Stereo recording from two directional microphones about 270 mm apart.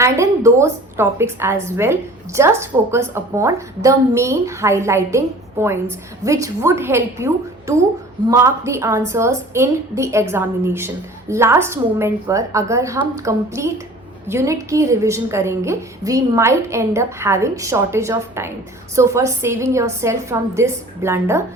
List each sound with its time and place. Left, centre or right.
0.0 s a woman's voice: centre